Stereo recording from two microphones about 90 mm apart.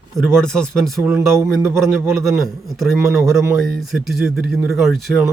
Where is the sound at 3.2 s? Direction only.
Centre (ahead or behind).